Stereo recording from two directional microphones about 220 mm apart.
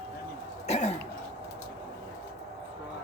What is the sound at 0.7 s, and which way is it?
Throat clearing, 30° left (ahead or behind).